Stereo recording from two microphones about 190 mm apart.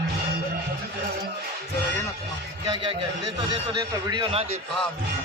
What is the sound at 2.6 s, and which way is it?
A man's voice, 25° right (ahead or behind).